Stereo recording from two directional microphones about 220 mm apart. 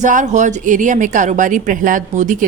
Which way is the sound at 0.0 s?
35° right (ahead or behind).